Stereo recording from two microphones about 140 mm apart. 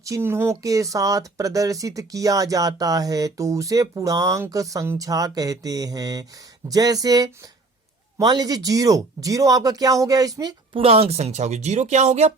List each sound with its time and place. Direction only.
0.0 s speech: 20° right (ahead or behind)
10.8 s speech: 45° right (ahead or behind)